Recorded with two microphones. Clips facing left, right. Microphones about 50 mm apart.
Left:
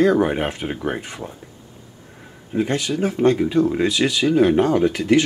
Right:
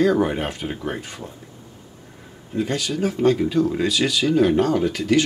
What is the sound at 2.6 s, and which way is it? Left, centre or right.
Speech, left.